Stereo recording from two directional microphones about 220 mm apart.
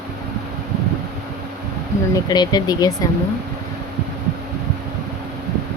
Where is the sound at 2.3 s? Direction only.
20° left (ahead or behind).